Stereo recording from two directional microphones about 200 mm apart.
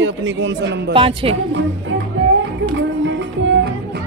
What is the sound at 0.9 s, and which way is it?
Speech, 25° right (ahead or behind).